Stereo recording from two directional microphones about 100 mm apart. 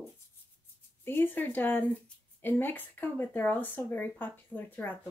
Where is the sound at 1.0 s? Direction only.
20° left (ahead or behind).